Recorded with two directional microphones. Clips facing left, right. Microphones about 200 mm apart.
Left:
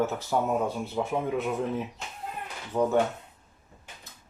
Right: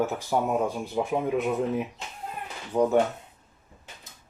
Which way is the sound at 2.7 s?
10° right (ahead or behind).